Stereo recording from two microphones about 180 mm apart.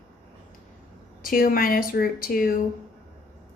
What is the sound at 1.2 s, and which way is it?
A woman's voice, 55° left (ahead or behind).